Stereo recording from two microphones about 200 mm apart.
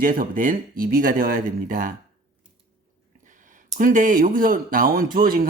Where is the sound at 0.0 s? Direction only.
45° right (ahead or behind).